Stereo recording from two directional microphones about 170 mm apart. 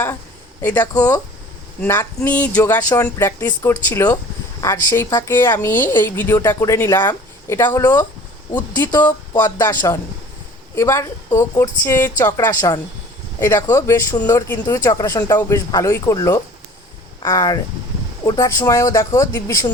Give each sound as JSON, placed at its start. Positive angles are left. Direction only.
{"t": 0.9, "sound": "a woman's voice", "side_deg": 20}